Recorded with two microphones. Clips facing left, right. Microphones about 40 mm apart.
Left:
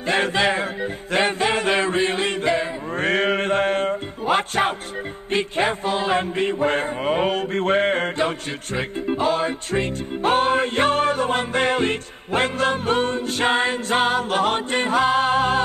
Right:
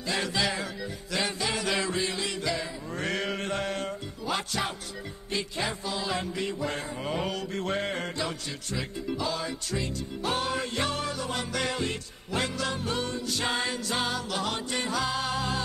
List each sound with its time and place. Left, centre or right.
0.0 s mantra: left
1.1 s chant: left
5.3 s mantra: left